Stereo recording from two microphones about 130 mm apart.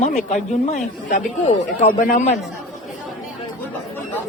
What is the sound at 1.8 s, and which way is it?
Speech, 65° left (ahead or behind).